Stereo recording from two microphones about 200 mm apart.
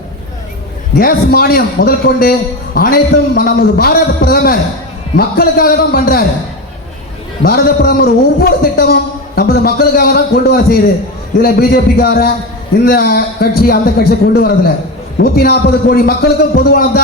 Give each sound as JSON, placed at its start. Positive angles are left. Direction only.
{"t": 0.9, "sound": "a man's voice", "side_deg": 50}
{"t": 7.4, "sound": "a man's voice", "side_deg": 50}